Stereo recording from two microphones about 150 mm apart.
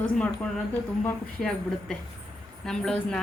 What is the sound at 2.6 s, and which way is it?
Speech, 5° left (ahead or behind).